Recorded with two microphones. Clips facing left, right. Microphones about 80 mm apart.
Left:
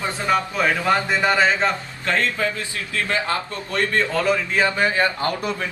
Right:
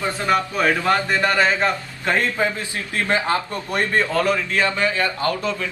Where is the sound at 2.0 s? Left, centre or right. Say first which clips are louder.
Right 2 dB; centre.